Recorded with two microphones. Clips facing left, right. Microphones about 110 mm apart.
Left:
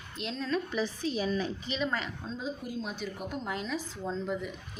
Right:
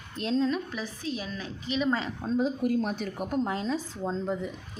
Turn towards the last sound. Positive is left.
turn(degrees=-30)  # may be behind; listen again after turning